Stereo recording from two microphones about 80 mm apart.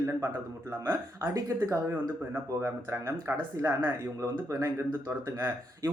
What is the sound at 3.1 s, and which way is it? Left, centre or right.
Speech, right.